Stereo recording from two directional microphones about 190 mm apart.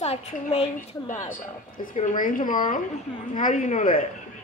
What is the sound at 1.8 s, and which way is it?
Speech, 45° left (ahead or behind).